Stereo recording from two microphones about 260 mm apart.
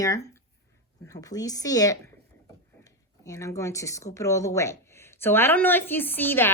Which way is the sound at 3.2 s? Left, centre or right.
Centre.